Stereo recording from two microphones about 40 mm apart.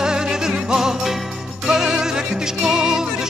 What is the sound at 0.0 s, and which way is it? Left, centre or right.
Music, centre.